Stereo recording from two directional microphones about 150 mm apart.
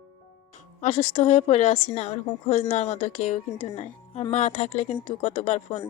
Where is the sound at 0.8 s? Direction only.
55° left (ahead or behind).